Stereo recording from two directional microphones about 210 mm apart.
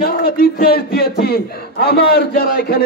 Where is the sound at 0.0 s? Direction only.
45° left (ahead or behind).